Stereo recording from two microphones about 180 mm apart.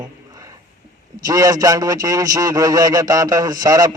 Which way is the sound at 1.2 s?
20° right (ahead or behind).